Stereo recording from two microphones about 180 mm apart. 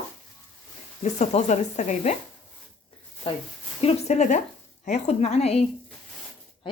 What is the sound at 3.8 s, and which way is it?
Speech, 40° left (ahead or behind).